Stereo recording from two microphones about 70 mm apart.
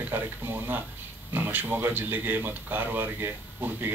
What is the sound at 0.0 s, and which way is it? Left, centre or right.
Speech, right.